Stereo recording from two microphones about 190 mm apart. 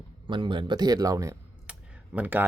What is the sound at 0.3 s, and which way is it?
Speech, 25° right (ahead or behind).